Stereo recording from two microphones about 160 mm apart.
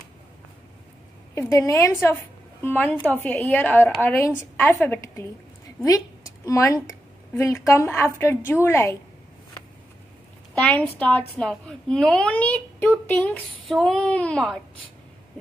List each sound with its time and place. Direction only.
1.3 s a woman's voice: 20° left (ahead or behind)
6.4 s a woman's voice: 20° left (ahead or behind)
10.6 s a woman's voice: 10° left (ahead or behind)